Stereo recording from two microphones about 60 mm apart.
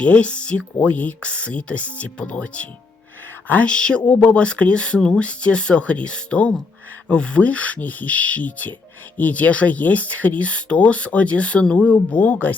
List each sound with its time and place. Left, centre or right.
0.0 s speech: centre
3.4 s a sound: left
3.7 s speech: centre
4.0 s speech: left